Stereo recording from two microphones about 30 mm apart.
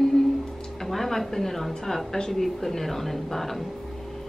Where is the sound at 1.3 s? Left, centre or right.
Centre.